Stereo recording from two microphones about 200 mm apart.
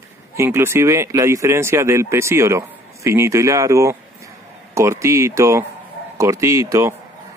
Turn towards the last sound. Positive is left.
turn(degrees=-15)  # may be behind; listen again after turning